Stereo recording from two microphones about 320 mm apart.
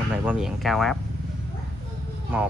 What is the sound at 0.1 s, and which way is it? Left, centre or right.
Speech, centre.